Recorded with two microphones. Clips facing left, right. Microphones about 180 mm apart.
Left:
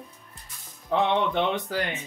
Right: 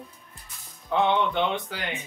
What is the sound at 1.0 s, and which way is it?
Speech, 40° left (ahead or behind).